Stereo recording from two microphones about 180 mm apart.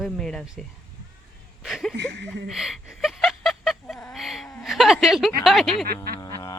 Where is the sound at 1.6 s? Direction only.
Centre (ahead or behind).